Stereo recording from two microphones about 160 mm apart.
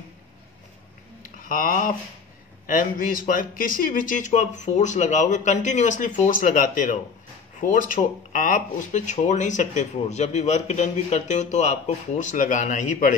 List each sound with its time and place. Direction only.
1.4 s speech: 60° left (ahead or behind)